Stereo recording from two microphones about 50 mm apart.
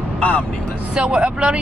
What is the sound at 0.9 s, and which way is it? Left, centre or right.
Speech, centre.